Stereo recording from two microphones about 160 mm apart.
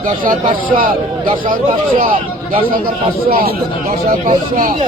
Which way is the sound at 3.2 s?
65° right (ahead or behind).